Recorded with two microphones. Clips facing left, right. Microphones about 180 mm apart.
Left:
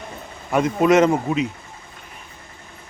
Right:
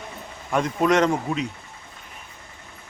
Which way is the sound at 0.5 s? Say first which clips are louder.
Left 4 dB; 5° left (ahead or behind).